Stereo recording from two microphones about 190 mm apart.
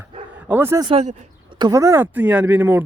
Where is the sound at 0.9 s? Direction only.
35° right (ahead or behind).